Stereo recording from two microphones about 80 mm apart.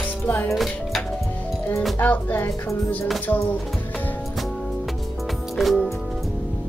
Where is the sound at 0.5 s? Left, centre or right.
Centre.